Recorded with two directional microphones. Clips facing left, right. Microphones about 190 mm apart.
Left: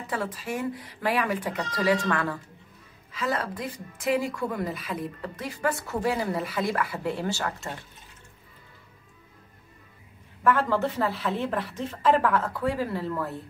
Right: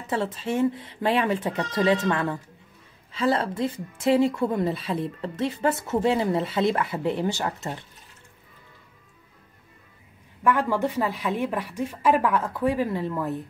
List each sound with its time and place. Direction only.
0.0 s a woman's voice: 25° right (ahead or behind)
10.4 s a woman's voice: 15° right (ahead or behind)